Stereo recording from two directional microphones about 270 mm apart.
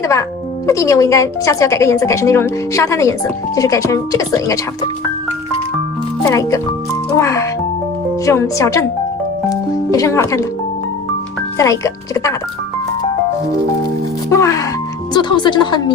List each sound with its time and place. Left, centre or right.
0.0 s a woman's voice: centre
6.3 s a woman's voice: centre
11.5 s a woman's voice: centre
14.3 s a woman's voice: centre